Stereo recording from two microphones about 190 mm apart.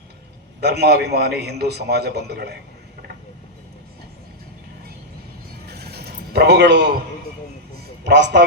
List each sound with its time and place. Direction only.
0.6 s a man's voice: 60° right (ahead or behind)
5.6 s a sound: 55° right (ahead or behind)
8.0 s a man's voice: 65° right (ahead or behind)